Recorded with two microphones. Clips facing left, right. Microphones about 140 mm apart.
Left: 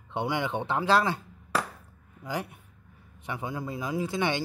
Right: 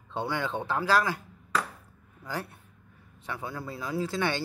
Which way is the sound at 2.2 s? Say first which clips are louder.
Left 2 dB; 15° left (ahead or behind).